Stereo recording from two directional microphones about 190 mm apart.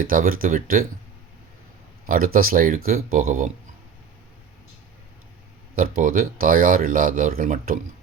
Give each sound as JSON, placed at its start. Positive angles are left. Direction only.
{"t": 0.0, "sound": "speech", "side_deg": -50}
{"t": 0.4, "sound": "speech", "side_deg": -35}
{"t": 2.0, "sound": "speech", "side_deg": -50}
{"t": 6.0, "sound": "speech", "side_deg": -45}